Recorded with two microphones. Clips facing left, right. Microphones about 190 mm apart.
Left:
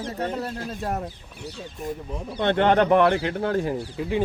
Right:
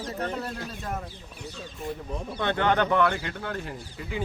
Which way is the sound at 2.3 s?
25° left (ahead or behind).